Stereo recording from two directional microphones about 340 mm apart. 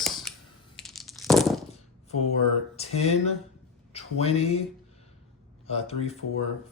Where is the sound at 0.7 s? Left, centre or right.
Centre.